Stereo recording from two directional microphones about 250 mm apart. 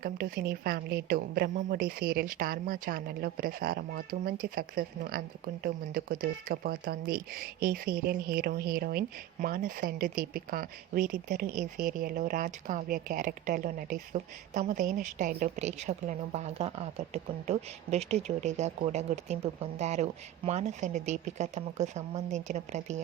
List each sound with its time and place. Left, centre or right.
0.0 s speech: right